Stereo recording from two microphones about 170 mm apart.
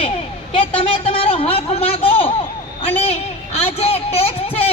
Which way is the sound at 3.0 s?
40° left (ahead or behind).